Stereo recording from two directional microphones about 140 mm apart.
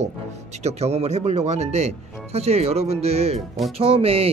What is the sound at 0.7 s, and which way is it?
Speech, 50° right (ahead or behind).